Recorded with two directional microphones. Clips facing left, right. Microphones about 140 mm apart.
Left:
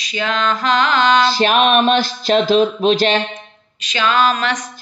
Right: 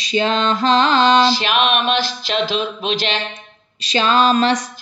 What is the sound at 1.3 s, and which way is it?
Speech, 45° left (ahead or behind).